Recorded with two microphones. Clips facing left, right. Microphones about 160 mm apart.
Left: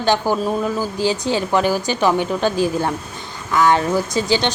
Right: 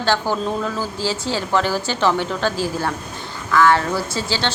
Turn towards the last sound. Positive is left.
turn(degrees=15)  # may be behind; listen again after turning